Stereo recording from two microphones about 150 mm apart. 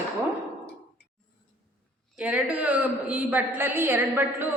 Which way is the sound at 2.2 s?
10° right (ahead or behind).